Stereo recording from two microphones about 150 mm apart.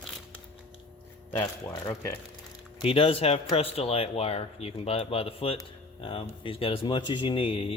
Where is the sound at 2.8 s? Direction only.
35° left (ahead or behind).